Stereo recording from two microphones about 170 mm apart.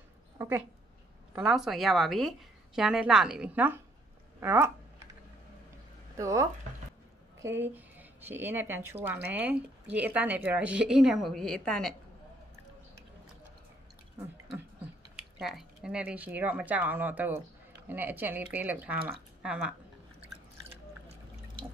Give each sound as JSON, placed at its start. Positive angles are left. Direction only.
{"t": 0.4, "sound": "a woman's voice", "side_deg": -15}
{"t": 4.4, "sound": "a sound", "side_deg": -15}
{"t": 6.1, "sound": "speech", "side_deg": -20}
{"t": 7.6, "sound": "speech", "side_deg": -10}
{"t": 15.4, "sound": "speech", "side_deg": -5}